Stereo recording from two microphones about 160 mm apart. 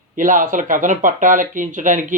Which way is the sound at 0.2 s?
55° right (ahead or behind).